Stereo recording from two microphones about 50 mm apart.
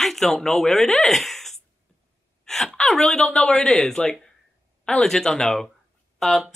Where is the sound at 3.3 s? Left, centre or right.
Left; by 6.4 s centre.